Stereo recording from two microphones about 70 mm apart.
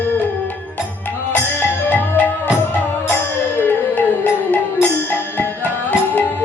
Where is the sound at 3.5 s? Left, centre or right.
Left.